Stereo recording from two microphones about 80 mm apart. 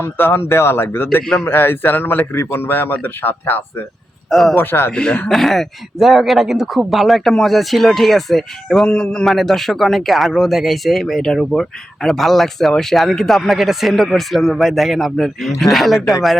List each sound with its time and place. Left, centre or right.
0.0 s speech: left
1.2 s a man's voice: centre
1.5 s speech: left
4.3 s speech: centre
4.5 s speech: left
4.9 s a man's voice: centre